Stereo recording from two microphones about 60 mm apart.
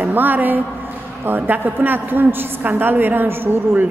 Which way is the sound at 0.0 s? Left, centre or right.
Right.